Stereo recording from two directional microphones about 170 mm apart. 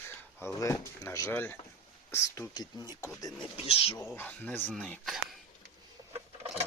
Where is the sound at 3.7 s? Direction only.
35° left (ahead or behind).